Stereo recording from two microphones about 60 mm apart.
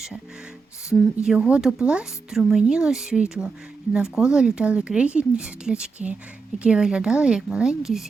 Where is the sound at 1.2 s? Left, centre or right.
Centre.